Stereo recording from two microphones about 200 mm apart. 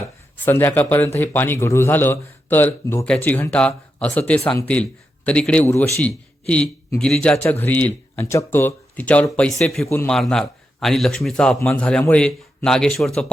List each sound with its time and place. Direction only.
0.3 s a man's voice: 10° left (ahead or behind)